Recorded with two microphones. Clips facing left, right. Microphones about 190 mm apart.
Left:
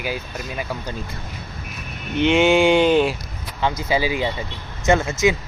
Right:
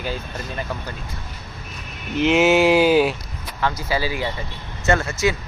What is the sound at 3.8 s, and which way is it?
Speech, 20° left (ahead or behind).